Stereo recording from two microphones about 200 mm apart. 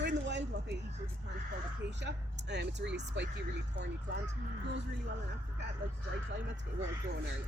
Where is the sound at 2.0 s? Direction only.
60° right (ahead or behind).